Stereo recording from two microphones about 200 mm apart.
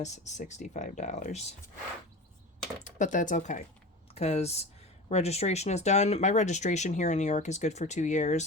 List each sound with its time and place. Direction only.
0.0 s speech: 35° left (ahead or behind)
2.8 s speech: 40° left (ahead or behind)